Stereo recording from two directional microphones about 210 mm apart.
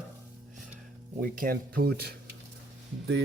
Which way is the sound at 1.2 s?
45° right (ahead or behind).